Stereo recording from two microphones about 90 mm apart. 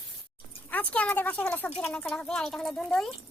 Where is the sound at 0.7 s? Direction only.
15° left (ahead or behind).